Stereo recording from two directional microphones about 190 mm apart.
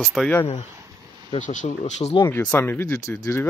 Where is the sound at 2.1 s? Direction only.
10° left (ahead or behind).